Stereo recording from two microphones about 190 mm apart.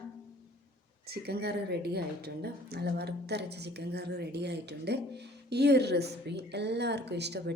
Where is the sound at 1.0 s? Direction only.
55° right (ahead or behind).